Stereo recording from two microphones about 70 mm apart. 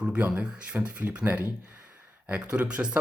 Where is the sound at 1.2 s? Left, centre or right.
Right.